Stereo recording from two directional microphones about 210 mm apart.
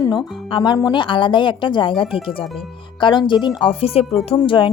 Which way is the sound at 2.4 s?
Centre (ahead or behind).